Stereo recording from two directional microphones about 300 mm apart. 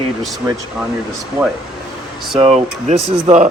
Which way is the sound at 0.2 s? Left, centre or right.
Centre.